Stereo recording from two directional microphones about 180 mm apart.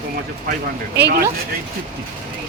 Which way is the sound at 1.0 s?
65° right (ahead or behind).